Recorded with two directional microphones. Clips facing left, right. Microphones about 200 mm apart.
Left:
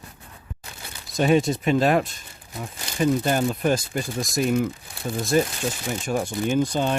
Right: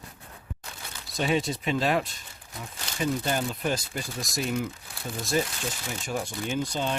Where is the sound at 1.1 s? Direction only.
50° left (ahead or behind).